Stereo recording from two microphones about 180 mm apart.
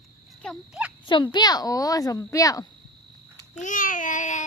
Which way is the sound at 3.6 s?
45° left (ahead or behind).